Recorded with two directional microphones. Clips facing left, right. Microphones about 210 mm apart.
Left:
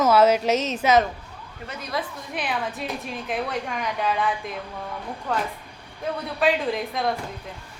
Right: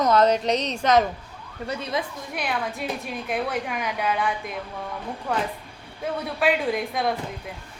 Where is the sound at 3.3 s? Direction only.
5° right (ahead or behind).